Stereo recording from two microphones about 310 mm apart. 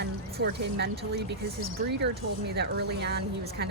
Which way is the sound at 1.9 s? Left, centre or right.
Right.